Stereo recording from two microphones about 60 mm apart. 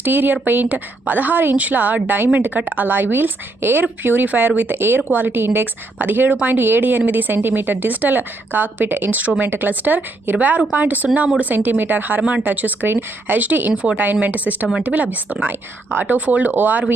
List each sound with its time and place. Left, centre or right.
0.0 s a woman's voice: right